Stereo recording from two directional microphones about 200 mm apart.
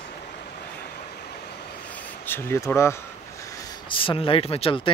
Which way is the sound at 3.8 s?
25° left (ahead or behind).